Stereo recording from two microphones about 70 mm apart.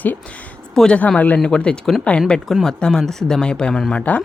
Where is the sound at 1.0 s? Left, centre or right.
Left.